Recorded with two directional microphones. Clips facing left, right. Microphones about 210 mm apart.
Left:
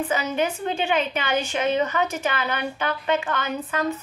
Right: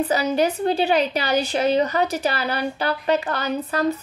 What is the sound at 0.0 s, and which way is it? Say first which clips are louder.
Speech: right 4 dB; 35° right (ahead or behind).